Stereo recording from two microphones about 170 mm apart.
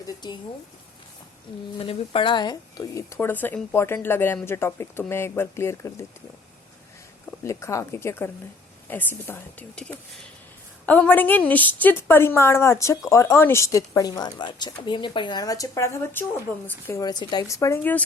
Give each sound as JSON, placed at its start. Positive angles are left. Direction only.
{"t": 1.8, "sound": "a woman's voice", "side_deg": 35}
{"t": 7.4, "sound": "a woman's voice", "side_deg": 15}